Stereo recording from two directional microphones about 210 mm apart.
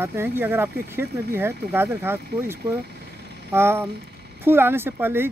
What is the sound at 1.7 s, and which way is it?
Speech, 10° right (ahead or behind).